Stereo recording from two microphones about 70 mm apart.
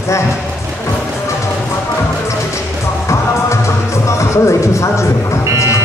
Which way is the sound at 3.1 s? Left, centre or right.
Left.